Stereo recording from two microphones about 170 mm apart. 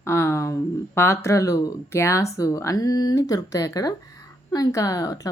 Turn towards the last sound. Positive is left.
turn(degrees=20)  # may be behind; listen again after turning